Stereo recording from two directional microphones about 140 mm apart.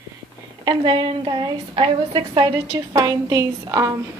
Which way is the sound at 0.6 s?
35° right (ahead or behind).